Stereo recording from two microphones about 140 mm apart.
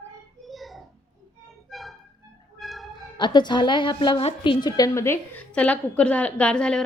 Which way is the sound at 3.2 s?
30° left (ahead or behind).